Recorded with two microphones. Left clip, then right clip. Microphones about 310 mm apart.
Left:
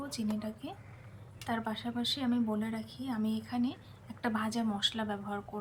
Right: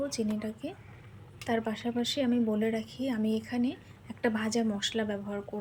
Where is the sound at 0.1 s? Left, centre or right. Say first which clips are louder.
Right 4 dB; centre.